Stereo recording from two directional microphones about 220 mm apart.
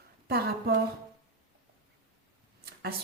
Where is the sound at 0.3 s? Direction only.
45° right (ahead or behind).